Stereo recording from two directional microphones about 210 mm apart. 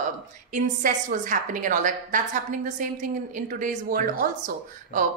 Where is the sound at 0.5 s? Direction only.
40° right (ahead or behind).